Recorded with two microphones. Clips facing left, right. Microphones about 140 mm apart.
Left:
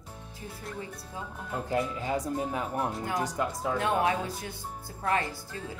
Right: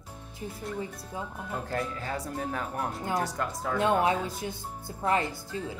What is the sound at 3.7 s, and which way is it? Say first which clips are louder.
Speech: right 3 dB; 25° right (ahead or behind).